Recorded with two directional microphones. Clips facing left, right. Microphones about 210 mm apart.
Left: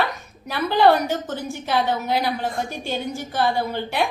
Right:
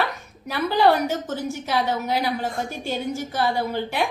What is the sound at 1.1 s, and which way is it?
Speech, 45° right (ahead or behind).